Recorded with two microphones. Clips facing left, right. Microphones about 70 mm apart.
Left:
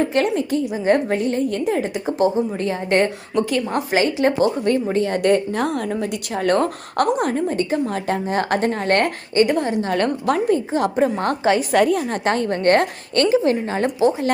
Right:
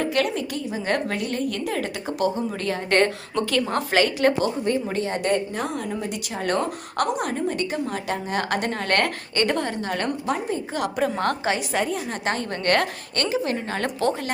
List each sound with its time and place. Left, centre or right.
0.0 s a woman's voice: left
0.6 s a woman's voice: centre
4.9 s a woman's voice: left; by 9.7 s centre
9.8 s a woman's voice: left
10.8 s a woman's voice: left
11.7 s a woman's voice: left
12.0 s a woman's voice: left
12.5 s a woman's voice: left
13.7 s a woman's voice: centre